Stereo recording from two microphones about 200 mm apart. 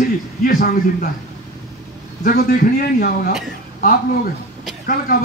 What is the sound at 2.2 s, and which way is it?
A man's voice, 45° left (ahead or behind).